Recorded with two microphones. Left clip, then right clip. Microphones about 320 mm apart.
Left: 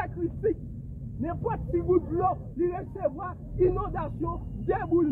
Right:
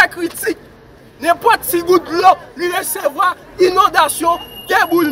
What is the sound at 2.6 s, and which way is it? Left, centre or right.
Speech, centre.